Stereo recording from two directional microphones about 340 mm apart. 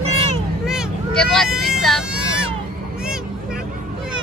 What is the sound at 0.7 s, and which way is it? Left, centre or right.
Vehicle, centre.